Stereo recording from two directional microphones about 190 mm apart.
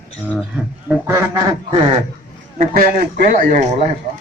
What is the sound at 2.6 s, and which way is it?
Speech, 45° right (ahead or behind).